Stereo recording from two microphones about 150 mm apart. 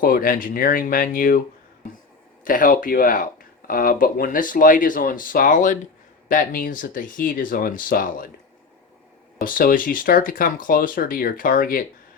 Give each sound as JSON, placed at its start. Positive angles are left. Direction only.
{"t": 0.0, "sound": "speech", "side_deg": 70}
{"t": 2.4, "sound": "speech", "side_deg": 65}
{"t": 9.4, "sound": "speech", "side_deg": 70}